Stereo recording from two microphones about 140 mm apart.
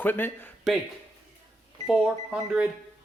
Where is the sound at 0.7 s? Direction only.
Centre (ahead or behind).